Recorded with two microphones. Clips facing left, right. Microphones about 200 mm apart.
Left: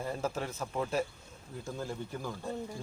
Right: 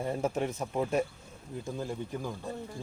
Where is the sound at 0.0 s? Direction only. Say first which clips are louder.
Right 4 dB; 20° right (ahead or behind).